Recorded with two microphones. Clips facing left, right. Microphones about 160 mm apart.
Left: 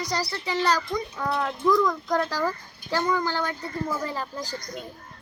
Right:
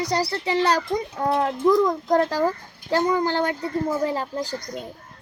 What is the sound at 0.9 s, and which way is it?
A child's voice, 35° right (ahead or behind).